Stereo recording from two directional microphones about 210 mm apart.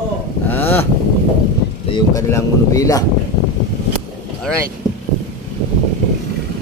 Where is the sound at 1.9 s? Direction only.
15° left (ahead or behind).